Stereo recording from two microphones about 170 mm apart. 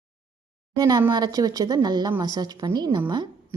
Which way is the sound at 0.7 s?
25° right (ahead or behind).